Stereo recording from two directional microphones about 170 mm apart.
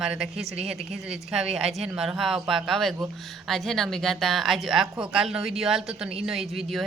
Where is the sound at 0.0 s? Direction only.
5° right (ahead or behind).